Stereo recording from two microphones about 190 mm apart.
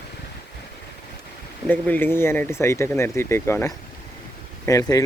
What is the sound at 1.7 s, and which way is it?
Speech, 10° left (ahead or behind).